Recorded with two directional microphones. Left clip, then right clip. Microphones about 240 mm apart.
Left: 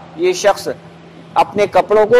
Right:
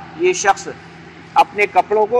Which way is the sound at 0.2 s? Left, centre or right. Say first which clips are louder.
Left 2 dB; left.